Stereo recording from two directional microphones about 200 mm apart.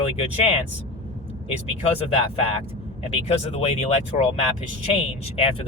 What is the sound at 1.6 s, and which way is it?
Speech, 30° left (ahead or behind).